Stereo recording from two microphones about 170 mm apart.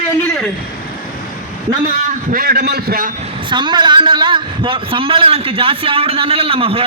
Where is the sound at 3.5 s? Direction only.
25° right (ahead or behind).